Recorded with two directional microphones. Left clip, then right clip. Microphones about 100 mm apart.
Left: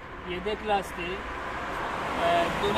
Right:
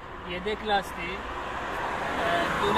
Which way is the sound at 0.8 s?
25° right (ahead or behind).